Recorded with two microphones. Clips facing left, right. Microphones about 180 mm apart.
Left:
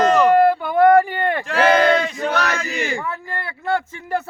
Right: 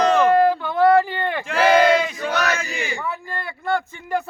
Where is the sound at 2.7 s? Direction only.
45° left (ahead or behind).